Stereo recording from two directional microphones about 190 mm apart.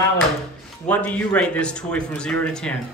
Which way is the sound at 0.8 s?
5° left (ahead or behind).